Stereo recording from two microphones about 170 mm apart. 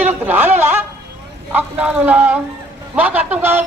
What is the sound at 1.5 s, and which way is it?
A man's voice, 10° right (ahead or behind).